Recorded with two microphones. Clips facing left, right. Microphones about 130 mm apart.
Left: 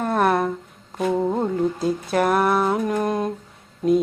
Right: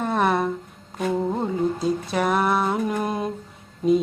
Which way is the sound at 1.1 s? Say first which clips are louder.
Left 2 dB; 15° left (ahead or behind).